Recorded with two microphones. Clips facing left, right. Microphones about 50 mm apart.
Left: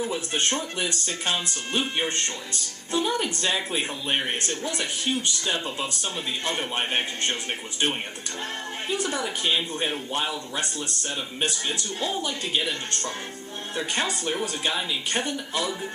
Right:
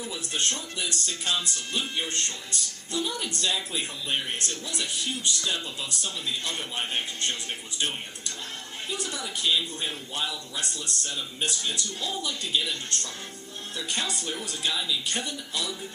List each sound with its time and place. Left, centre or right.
0.0 s speech: left
8.9 s speech: left